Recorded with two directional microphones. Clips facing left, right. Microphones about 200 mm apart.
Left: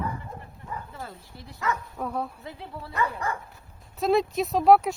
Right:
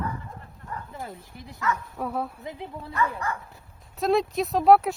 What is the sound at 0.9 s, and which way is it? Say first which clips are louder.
Speech: right 2 dB; 15° right (ahead or behind).